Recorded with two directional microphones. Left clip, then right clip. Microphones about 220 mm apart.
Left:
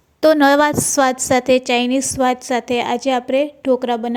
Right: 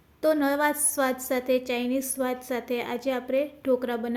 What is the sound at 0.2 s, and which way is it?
A woman's voice, 40° left (ahead or behind).